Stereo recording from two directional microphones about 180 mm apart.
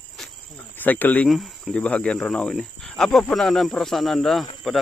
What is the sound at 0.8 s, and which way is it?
Speech, 10° left (ahead or behind).